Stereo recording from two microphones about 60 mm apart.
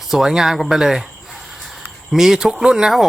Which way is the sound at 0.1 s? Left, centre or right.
Centre.